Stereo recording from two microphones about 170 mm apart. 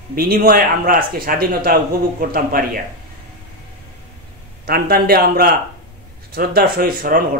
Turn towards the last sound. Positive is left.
turn(degrees=-60)  # may be behind; listen again after turning